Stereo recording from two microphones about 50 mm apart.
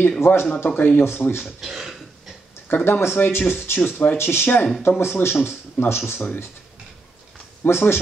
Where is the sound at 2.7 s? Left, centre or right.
Left.